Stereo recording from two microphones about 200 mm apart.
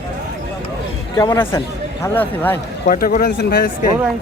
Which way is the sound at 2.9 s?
45° left (ahead or behind).